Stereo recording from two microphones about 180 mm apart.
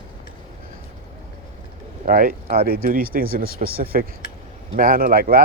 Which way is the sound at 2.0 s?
50° right (ahead or behind).